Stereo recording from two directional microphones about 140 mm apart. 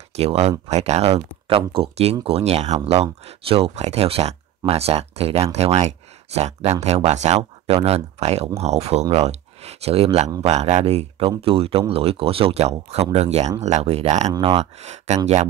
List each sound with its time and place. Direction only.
0.1 s speech: 50° right (ahead or behind)
14.3 s speech: 40° right (ahead or behind)
14.8 s speech: 55° right (ahead or behind)